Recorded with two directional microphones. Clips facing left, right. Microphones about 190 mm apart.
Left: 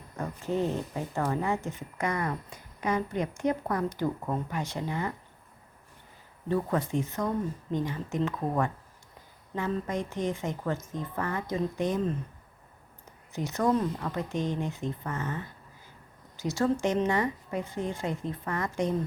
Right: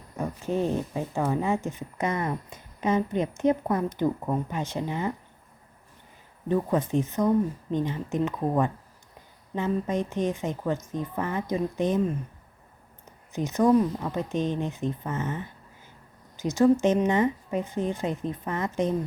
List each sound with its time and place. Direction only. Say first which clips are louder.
0.2 s speech: right 2 dB; 15° right (ahead or behind)
6.5 s speech: right 3 dB; 20° right (ahead or behind)
13.3 s speech: right 6 dB; 20° right (ahead or behind)